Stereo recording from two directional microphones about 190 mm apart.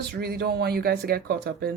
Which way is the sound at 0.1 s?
55° right (ahead or behind).